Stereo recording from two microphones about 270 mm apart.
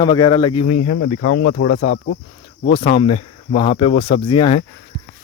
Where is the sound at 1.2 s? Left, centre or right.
Left.